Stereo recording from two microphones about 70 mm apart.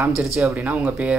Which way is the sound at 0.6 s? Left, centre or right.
Centre.